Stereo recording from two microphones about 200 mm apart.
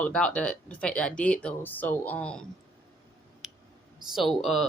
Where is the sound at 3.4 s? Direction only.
5° right (ahead or behind).